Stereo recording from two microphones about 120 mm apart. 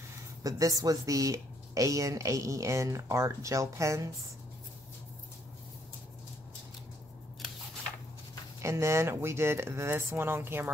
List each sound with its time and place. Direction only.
0.4 s speech: 30° right (ahead or behind)
8.6 s speech: 25° right (ahead or behind)